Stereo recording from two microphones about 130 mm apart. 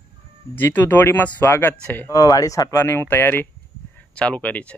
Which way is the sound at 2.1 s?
30° left (ahead or behind).